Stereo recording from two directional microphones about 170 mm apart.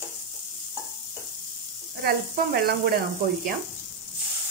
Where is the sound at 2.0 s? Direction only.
65° right (ahead or behind).